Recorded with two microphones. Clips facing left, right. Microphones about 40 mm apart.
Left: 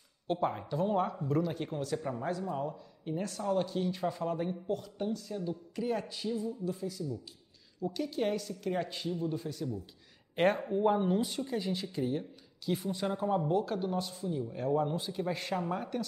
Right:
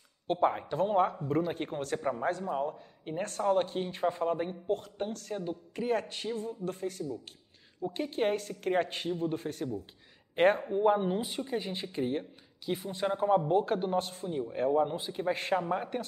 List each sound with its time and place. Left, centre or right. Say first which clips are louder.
0.3 s speech: right 4 dB; right
7.8 s a woman's voice: right 2 dB; right
10.3 s speech: right 3 dB; centre; by 12.3 s right
12.6 s speech: right 1 dB; right
14.7 s speech: right 1 dB; right